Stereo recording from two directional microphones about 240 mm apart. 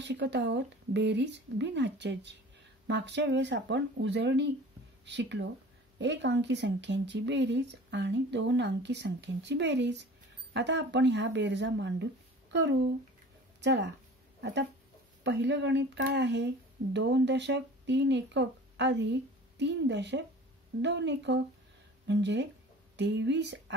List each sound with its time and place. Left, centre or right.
0.0 s speech: right